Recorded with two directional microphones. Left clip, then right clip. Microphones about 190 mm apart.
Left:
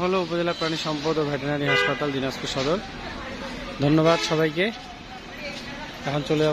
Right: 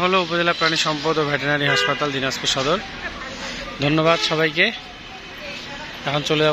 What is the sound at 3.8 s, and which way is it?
Speech, 15° left (ahead or behind).